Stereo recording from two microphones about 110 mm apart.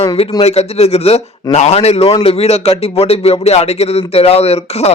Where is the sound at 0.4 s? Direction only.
70° left (ahead or behind).